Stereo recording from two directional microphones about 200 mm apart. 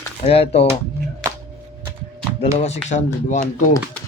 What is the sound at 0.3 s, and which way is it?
Speech, 30° left (ahead or behind).